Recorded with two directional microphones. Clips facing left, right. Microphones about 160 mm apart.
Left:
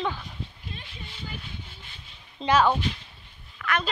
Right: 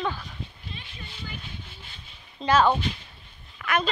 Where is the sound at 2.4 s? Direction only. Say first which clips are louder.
Even; 25° left (ahead or behind).